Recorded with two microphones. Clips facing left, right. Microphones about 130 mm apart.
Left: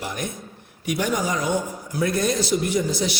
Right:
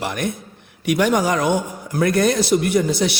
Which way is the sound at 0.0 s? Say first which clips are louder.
Right 6 dB; 70° right (ahead or behind).